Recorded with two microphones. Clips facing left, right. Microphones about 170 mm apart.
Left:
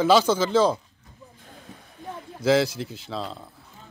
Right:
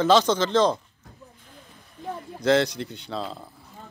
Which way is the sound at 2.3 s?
5° left (ahead or behind).